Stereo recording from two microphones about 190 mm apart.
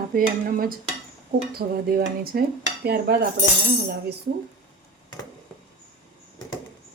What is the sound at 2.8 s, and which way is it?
Cutlery, 55° right (ahead or behind).